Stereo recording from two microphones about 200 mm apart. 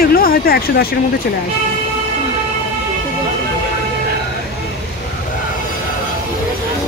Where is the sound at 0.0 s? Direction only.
50° left (ahead or behind).